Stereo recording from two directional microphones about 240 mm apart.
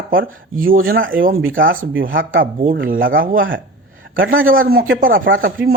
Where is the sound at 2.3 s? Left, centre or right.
Right.